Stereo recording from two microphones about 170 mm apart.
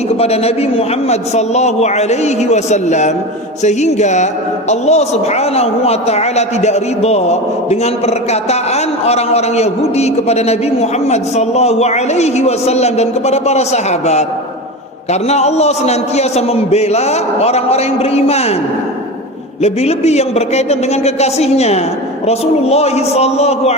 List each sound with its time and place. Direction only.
0.2 s a woman's voice: 35° left (ahead or behind)
3.6 s music: 40° left (ahead or behind)
4.7 s a woman's voice: 40° left (ahead or behind)
15.3 s a woman's voice: 40° left (ahead or behind)
19.6 s a woman's voice: 40° left (ahead or behind)